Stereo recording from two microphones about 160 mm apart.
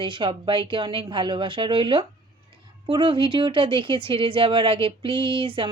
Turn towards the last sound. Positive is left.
turn(degrees=-35)  # may be behind; listen again after turning